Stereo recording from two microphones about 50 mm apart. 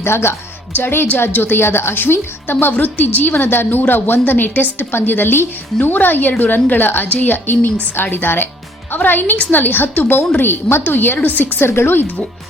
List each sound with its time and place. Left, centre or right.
0.0 s a woman's voice: left
10.4 s a woman's voice: left
11.6 s a woman's voice: left